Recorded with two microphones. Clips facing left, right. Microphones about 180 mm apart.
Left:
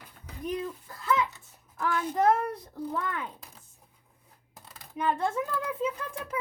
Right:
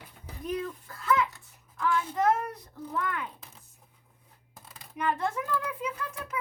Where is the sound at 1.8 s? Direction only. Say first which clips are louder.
Right 1 dB; 45° left (ahead or behind).